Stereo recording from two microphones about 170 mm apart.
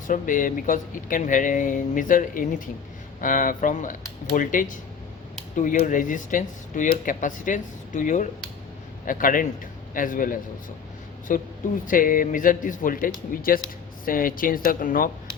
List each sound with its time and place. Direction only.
0.1 s speech: 50° left (ahead or behind)